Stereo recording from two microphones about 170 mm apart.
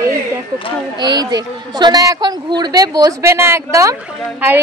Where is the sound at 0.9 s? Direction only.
25° right (ahead or behind).